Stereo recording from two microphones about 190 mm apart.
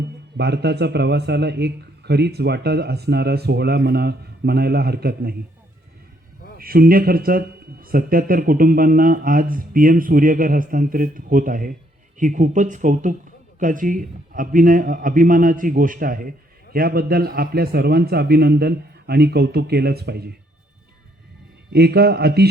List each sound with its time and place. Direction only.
0.3 s a man's voice: 60° right (ahead or behind)
6.6 s a man's voice: 50° right (ahead or behind)
21.7 s a man's voice: 55° right (ahead or behind)